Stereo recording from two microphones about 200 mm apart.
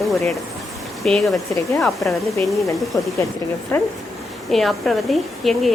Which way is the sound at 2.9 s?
15° left (ahead or behind).